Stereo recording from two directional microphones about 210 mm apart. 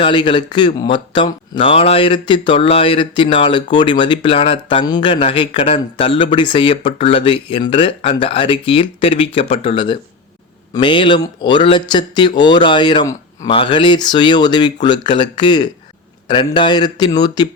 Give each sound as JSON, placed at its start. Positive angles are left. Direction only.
{"t": 0.0, "sound": "speech", "side_deg": 25}